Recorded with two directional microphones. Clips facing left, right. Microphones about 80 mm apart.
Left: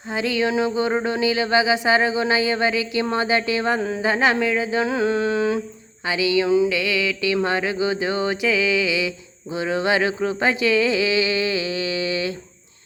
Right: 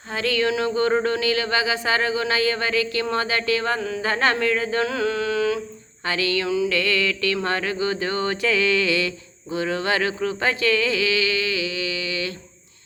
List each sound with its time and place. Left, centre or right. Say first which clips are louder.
0.1 s mantra: left 1 dB; centre
4.0 s mantra: left 1 dB; centre
4.9 s humming: left 3 dB; left
6.1 s mantra: left 4 dB; centre